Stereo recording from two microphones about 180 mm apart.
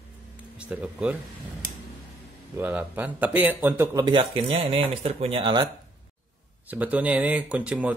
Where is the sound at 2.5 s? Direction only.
10° right (ahead or behind); by 5.7 s 25° right (ahead or behind).